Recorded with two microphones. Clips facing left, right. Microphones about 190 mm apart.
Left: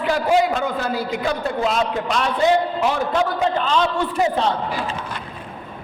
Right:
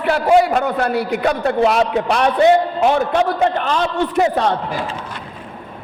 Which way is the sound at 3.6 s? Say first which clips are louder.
Right 1 dB; 55° right (ahead or behind).